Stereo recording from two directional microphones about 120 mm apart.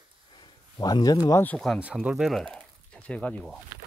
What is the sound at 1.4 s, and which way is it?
Speech, 5° left (ahead or behind).